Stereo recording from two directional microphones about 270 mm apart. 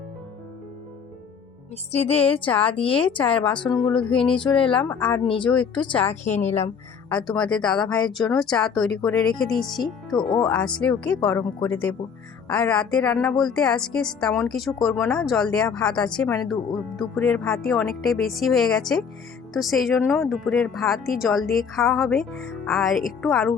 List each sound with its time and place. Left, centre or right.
1.9 s a woman's voice: left
4.7 s speech: centre
5.1 s a woman's voice: centre
5.4 s speech: centre
5.7 s a woman's voice: centre
7.1 s speech: centre